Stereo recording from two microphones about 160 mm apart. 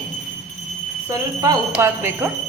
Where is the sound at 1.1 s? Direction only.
20° right (ahead or behind).